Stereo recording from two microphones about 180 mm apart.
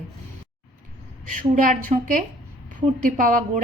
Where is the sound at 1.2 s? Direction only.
45° right (ahead or behind).